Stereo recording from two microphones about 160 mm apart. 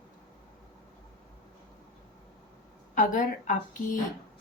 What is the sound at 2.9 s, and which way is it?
Speech, 55° left (ahead or behind).